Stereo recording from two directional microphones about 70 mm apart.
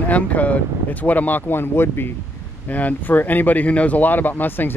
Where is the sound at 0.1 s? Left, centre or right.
Left.